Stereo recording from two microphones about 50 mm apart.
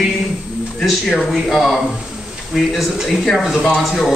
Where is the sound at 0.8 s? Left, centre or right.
Centre.